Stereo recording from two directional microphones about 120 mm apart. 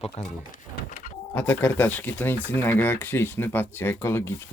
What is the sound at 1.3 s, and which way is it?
Speech, 20° left (ahead or behind).